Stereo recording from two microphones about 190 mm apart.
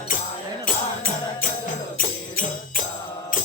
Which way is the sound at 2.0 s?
45° left (ahead or behind).